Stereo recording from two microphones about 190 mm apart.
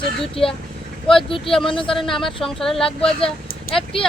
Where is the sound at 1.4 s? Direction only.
Centre (ahead or behind).